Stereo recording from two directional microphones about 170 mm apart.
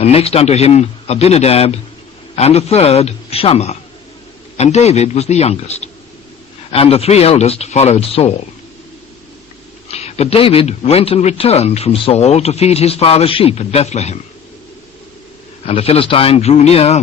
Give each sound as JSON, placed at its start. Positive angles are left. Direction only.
{"t": 0.0, "sound": "speech", "side_deg": 35}
{"t": 9.9, "sound": "speech", "side_deg": 40}
{"t": 15.6, "sound": "speech", "side_deg": 35}